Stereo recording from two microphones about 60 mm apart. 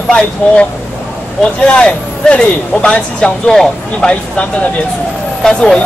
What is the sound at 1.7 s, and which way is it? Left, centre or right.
Speech, centre.